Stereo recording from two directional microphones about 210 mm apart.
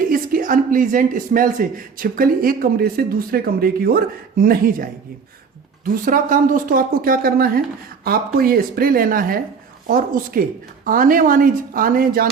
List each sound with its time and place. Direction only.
0.1 s speech: 40° right (ahead or behind)